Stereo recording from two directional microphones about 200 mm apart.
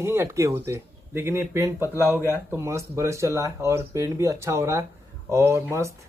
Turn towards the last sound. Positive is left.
turn(degrees=-15)  # may be behind; listen again after turning